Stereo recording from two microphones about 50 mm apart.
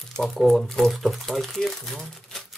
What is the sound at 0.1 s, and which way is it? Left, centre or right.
Speech, centre.